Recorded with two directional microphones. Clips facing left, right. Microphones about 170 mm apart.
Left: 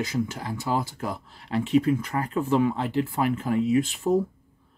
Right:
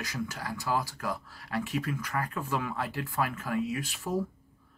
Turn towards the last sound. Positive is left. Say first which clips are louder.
# left 11 dB
turn(degrees=25)  # may be behind; listen again after turning